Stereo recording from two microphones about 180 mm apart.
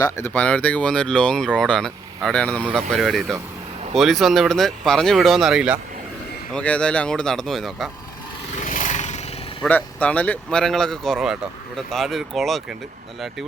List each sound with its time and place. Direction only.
0.0 s speech: 10° left (ahead or behind); by 5.8 s 5° right (ahead or behind)
6.5 s speech: 5° left (ahead or behind)
8.5 s a sound: 45° left (ahead or behind)
9.6 s speech: 10° left (ahead or behind)